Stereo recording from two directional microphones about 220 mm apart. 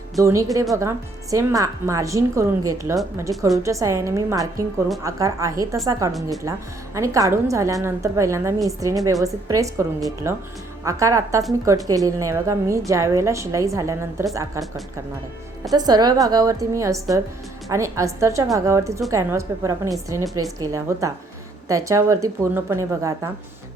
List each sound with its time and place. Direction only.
0.2 s a woman's voice: 15° right (ahead or behind)
15.7 s a woman's voice: 20° right (ahead or behind)